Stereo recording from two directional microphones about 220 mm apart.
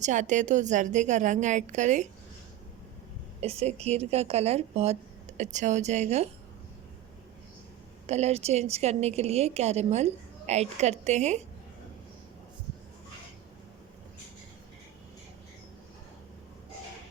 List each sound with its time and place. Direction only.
0.0 s a woman's voice: 35° right (ahead or behind)
3.4 s a woman's voice: 30° right (ahead or behind)
8.0 s a woman's voice: 30° right (ahead or behind)